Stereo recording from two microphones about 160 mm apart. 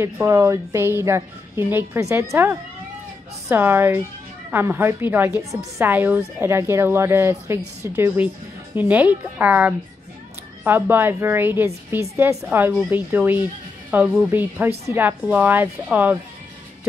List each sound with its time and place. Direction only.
0.0 s speech: 20° right (ahead or behind)
3.4 s speech: 15° right (ahead or behind)